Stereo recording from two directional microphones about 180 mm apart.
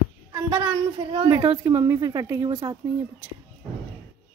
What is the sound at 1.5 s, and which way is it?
Speech, 15° right (ahead or behind).